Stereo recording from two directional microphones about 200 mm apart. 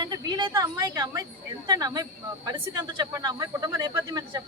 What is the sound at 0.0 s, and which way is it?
A woman's voice, 20° right (ahead or behind).